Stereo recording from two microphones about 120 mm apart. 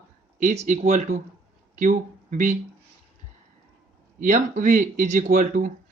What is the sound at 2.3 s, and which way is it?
Speech, 90° right.